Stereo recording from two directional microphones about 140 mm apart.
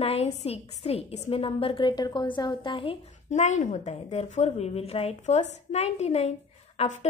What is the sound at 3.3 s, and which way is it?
A woman's voice, 60° left (ahead or behind).